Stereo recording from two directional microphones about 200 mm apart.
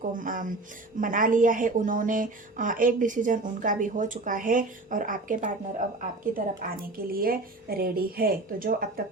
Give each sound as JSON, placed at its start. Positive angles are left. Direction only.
{"t": 0.0, "sound": "a woman's voice", "side_deg": -40}